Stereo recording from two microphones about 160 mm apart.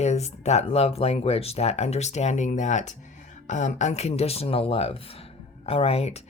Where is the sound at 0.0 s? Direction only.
45° left (ahead or behind).